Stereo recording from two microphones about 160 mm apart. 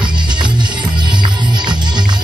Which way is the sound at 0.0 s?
30° right (ahead or behind).